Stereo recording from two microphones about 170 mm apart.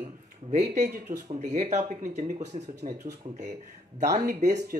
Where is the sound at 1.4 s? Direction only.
40° right (ahead or behind).